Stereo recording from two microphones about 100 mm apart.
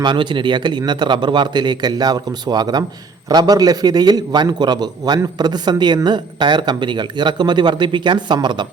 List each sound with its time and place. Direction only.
0.0 s a man's voice: 50° right (ahead or behind)